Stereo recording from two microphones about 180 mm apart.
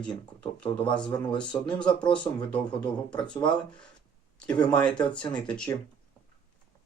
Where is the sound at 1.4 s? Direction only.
5° left (ahead or behind).